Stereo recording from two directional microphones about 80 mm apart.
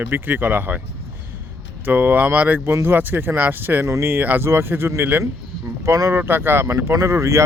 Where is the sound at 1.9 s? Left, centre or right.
Right.